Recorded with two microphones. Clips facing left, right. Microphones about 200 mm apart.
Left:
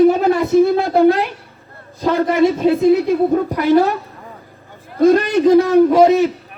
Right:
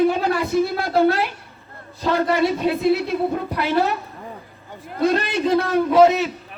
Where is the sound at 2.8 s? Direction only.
15° left (ahead or behind).